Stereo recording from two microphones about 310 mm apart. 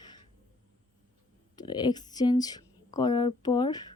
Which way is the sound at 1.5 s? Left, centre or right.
Centre.